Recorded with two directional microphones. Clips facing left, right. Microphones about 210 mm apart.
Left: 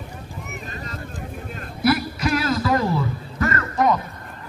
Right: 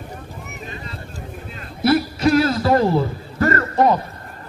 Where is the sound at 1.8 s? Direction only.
30° right (ahead or behind).